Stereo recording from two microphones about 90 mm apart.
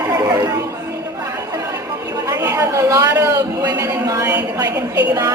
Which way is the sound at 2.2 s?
40° right (ahead or behind).